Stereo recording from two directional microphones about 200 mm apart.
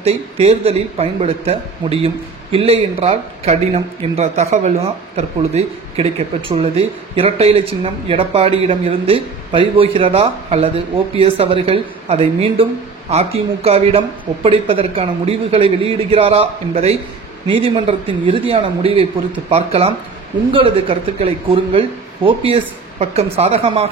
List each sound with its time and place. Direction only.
0.0 s speech: 30° right (ahead or behind)